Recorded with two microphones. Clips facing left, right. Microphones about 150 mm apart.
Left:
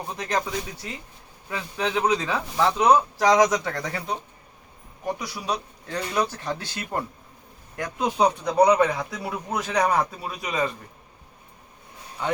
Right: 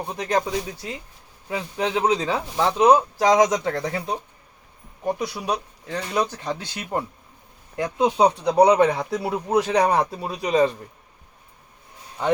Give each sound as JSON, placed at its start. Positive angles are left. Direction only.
{"t": 0.1, "sound": "speech", "side_deg": -20}
{"t": 5.0, "sound": "speech", "side_deg": -25}